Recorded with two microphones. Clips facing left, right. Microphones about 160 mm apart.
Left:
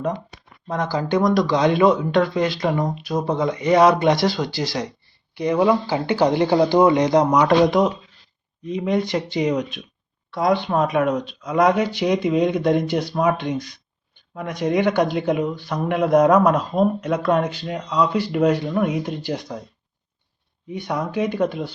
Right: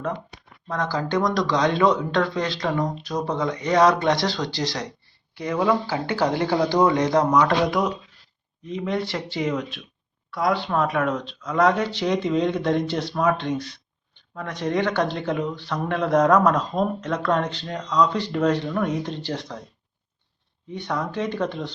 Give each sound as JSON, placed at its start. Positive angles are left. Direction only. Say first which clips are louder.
{"t": 0.7, "sound": "speech", "louder": "left 3 dB", "side_deg": 10}
{"t": 20.7, "sound": "speech", "louder": "left 2 dB", "side_deg": 10}